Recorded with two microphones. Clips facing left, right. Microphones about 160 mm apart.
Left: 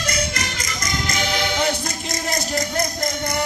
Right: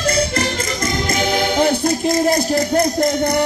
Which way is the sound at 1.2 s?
50° right (ahead or behind).